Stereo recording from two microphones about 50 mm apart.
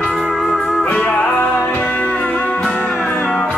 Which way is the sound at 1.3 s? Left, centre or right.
Left.